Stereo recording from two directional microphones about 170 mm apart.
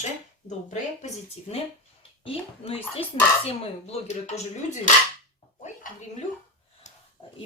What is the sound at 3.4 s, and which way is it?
Speech, 40° left (ahead or behind).